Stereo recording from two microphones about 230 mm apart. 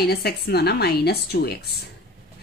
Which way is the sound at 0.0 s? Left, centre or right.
Left.